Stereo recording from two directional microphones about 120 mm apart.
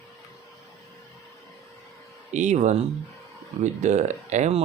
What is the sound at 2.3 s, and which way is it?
Speech, 80° right.